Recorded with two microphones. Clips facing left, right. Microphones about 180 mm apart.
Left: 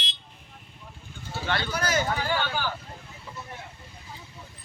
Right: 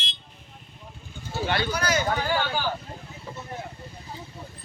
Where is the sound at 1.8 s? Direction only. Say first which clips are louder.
Left 2 dB; 50° left (ahead or behind).